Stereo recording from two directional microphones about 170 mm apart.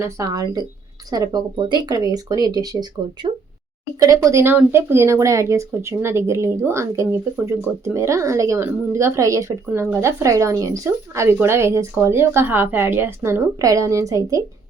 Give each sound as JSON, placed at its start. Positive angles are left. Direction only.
{"t": 0.0, "sound": "speech", "side_deg": -20}